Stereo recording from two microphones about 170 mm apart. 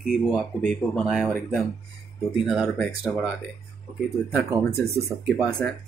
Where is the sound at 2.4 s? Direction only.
Centre (ahead or behind).